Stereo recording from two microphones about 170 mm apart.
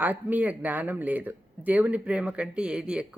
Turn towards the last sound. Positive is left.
turn(degrees=-5)  # may be behind; listen again after turning